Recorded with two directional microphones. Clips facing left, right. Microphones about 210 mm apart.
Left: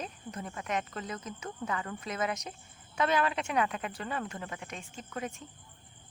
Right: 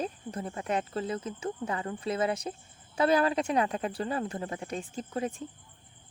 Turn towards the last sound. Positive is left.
turn(degrees=-30)  # may be behind; listen again after turning